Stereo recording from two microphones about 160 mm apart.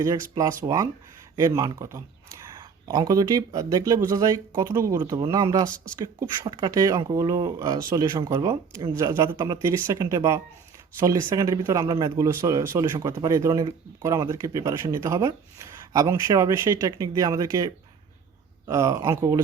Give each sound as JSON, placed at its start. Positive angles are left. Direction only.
{"t": 0.0, "sound": "speech", "side_deg": -20}
{"t": 5.7, "sound": "speech", "side_deg": 5}
{"t": 6.1, "sound": "speech", "side_deg": -25}
{"t": 18.7, "sound": "speech", "side_deg": -20}